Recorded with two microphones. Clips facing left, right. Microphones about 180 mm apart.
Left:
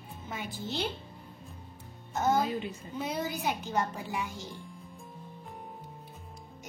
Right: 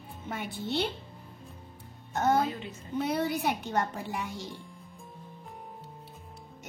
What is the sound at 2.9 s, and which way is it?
A woman's voice, 65° right (ahead or behind).